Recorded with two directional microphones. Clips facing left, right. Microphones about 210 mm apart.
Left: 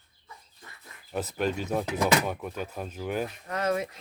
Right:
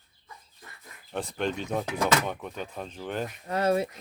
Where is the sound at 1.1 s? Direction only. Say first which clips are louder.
Left 1 dB; 5° left (ahead or behind).